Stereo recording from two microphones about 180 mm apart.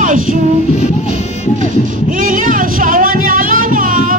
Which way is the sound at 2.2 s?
50° right (ahead or behind).